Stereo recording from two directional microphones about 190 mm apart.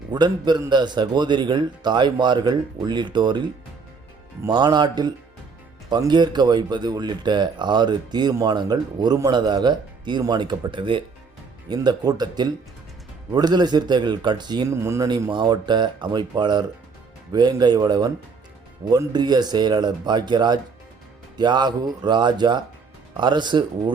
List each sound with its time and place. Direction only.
0.1 s speech: 25° right (ahead or behind)
4.4 s speech: 20° right (ahead or behind)